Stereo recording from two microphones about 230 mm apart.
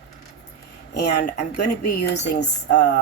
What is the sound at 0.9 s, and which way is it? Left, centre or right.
Speech, left.